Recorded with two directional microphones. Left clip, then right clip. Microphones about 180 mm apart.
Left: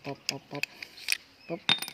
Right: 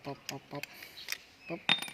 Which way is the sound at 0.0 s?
30° left (ahead or behind).